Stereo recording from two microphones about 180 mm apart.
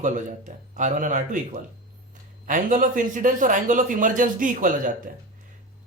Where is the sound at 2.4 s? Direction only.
45° right (ahead or behind).